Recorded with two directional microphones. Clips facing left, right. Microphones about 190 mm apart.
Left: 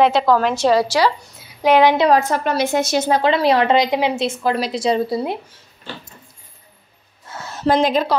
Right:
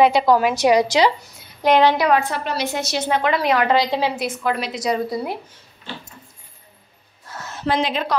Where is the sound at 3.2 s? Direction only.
30° left (ahead or behind).